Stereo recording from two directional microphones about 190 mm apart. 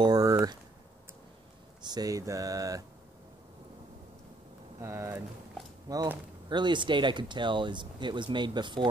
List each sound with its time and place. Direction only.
0.0 s a sound: 20° right (ahead or behind)
1.8 s speech: 20° right (ahead or behind)
4.8 s speech: 10° right (ahead or behind)